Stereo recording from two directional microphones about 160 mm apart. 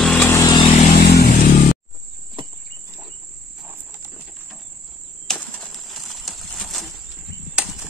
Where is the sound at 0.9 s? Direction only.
90° left.